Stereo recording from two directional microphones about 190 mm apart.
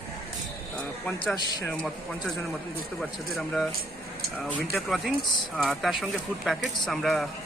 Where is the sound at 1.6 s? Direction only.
Centre (ahead or behind).